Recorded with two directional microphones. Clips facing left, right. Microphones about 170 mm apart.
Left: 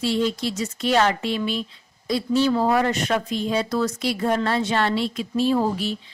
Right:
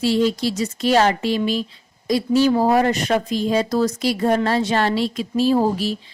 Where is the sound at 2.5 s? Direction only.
35° right (ahead or behind).